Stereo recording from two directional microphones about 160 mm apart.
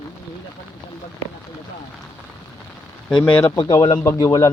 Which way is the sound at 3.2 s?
20° left (ahead or behind).